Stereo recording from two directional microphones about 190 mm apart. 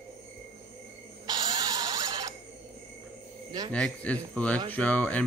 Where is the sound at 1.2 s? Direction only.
20° right (ahead or behind).